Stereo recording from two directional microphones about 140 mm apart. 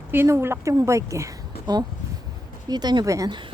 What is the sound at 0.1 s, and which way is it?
Speech, 15° right (ahead or behind).